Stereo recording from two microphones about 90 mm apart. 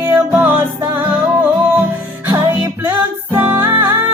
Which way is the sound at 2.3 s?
25° right (ahead or behind).